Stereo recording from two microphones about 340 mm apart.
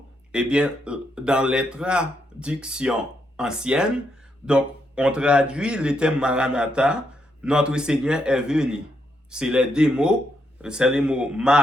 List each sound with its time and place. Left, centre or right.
0.3 s a man's voice: centre